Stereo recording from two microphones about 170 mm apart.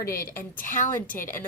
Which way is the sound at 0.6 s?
50° left (ahead or behind).